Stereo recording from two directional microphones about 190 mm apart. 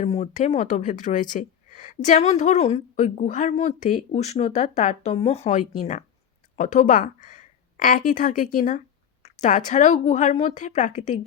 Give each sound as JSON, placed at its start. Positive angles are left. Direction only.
{"t": 0.0, "sound": "a woman's voice", "side_deg": 35}